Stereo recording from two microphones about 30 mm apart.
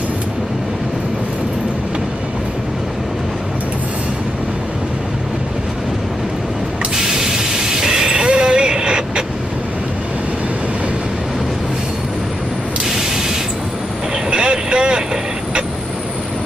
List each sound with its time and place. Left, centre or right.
7.0 s train: centre
14.3 s vehicle: right